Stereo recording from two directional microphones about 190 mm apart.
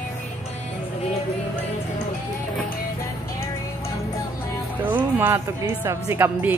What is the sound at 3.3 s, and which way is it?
Music, 15° left (ahead or behind).